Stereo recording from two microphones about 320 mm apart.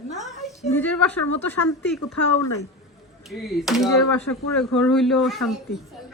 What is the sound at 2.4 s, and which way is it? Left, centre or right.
Speech, left.